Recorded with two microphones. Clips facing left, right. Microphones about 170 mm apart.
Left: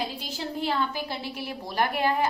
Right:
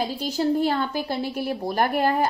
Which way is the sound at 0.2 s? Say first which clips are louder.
Right 10 dB; 45° right (ahead or behind).